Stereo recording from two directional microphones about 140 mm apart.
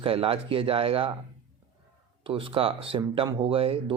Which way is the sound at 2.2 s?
40° right (ahead or behind).